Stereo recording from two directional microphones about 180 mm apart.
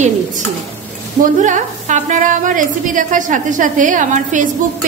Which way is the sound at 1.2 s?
45° right (ahead or behind).